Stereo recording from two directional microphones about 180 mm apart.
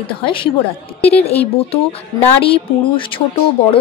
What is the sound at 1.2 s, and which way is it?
A woman's voice, 35° left (ahead or behind).